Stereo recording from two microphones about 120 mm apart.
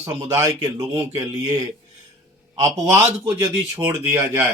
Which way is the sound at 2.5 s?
30° right (ahead or behind).